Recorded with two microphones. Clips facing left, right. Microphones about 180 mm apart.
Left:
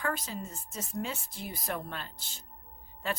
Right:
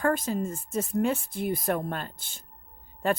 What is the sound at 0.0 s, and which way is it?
Speech, 50° right (ahead or behind).